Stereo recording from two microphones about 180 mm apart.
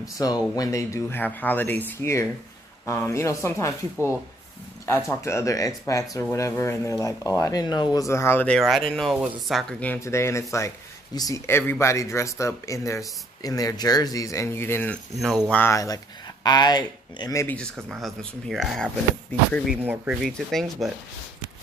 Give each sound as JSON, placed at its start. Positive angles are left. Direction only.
{"t": 0.2, "sound": "speech", "side_deg": 20}
{"t": 5.0, "sound": "speech", "side_deg": 15}
{"t": 17.8, "sound": "speech", "side_deg": 0}